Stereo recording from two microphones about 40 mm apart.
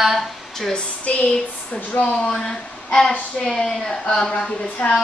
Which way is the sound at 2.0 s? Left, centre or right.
Left.